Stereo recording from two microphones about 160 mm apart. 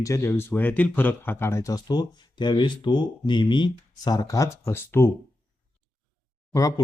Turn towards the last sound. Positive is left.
turn(degrees=20)  # may be behind; listen again after turning